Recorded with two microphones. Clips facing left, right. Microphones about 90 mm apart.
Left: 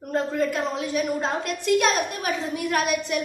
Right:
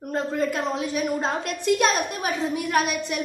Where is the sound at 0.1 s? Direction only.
5° right (ahead or behind).